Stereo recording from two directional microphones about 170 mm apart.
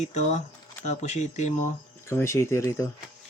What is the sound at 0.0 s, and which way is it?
Speech, 45° left (ahead or behind).